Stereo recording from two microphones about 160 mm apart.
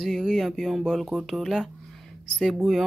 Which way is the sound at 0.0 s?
Centre (ahead or behind).